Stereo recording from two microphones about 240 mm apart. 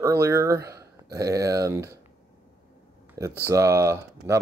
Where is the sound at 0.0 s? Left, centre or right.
Centre.